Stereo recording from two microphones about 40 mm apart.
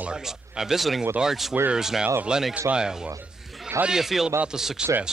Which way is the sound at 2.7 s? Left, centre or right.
Right.